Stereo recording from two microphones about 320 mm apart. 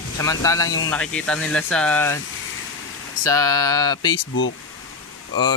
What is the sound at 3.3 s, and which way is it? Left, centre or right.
Speech, centre.